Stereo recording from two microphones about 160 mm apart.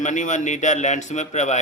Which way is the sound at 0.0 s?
50° left (ahead or behind).